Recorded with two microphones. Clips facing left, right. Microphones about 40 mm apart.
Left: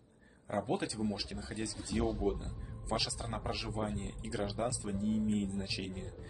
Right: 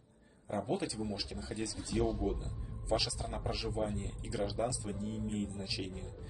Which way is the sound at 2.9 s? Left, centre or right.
Centre.